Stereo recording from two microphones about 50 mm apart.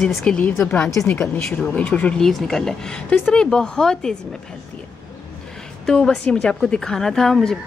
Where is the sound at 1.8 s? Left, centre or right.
Left.